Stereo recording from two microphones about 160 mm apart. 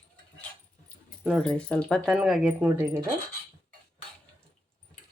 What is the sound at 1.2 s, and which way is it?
Speech, centre (ahead or behind).